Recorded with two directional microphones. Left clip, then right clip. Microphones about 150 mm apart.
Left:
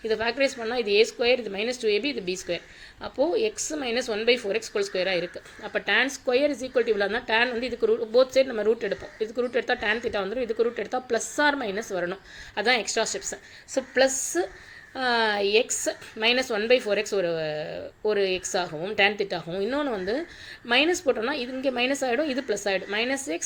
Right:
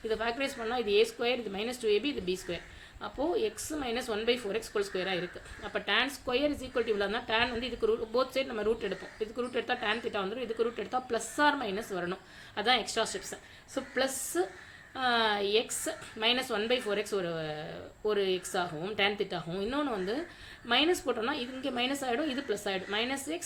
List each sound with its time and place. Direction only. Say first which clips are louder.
0.1 s a woman's voice: left 8 dB; 25° left (ahead or behind)